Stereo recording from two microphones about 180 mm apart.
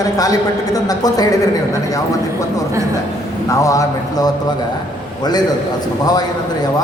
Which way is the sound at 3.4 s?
20° left (ahead or behind).